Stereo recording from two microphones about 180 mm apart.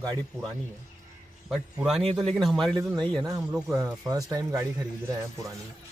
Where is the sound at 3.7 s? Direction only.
15° right (ahead or behind).